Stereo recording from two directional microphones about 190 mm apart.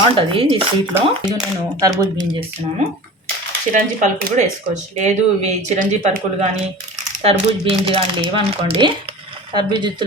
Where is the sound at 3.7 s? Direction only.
40° right (ahead or behind).